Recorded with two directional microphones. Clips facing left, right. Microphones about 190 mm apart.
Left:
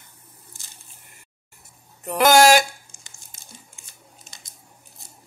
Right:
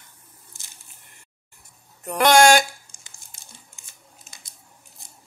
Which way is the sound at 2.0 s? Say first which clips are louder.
Left 1 dB; 5° left (ahead or behind).